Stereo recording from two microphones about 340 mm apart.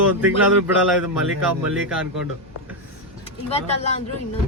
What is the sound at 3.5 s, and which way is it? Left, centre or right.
Speech, centre.